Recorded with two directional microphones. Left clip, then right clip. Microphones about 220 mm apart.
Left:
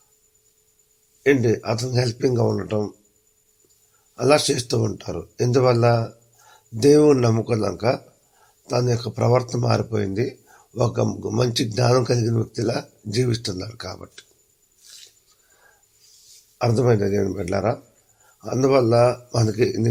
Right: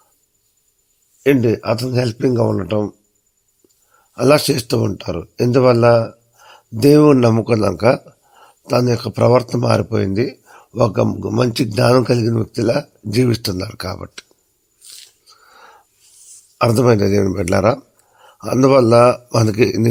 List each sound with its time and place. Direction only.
1.2 s speech: 40° right (ahead or behind)
4.1 s speech: 45° right (ahead or behind)
16.6 s speech: 40° right (ahead or behind)